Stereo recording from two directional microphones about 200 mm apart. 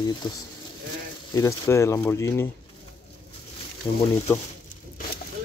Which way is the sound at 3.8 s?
10° left (ahead or behind).